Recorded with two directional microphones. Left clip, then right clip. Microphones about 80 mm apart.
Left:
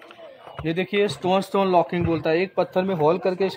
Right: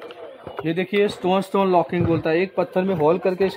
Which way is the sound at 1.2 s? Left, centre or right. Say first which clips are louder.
Right 1 dB; left.